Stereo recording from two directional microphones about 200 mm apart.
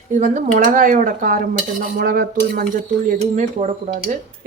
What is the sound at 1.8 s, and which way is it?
Dishes, 45° right (ahead or behind).